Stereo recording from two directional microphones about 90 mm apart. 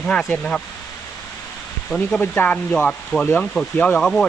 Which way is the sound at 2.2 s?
20° left (ahead or behind).